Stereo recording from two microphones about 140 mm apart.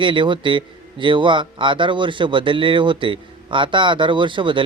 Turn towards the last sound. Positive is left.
turn(degrees=-35)  # may be behind; listen again after turning